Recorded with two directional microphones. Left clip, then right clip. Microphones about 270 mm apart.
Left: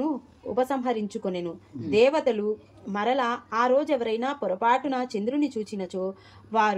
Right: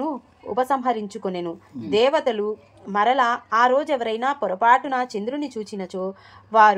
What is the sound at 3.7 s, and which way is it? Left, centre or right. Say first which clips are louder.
A woman's voice: right 2 dB; centre.